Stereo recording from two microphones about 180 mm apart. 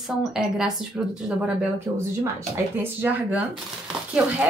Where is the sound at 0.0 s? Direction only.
Centre (ahead or behind).